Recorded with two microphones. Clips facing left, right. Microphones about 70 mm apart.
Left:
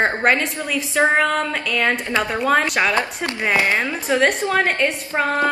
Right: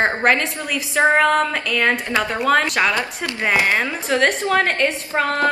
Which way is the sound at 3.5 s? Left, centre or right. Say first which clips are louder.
Right 1 dB; centre.